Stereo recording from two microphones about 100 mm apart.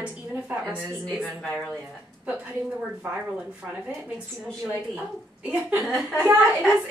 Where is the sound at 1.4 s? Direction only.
5° left (ahead or behind).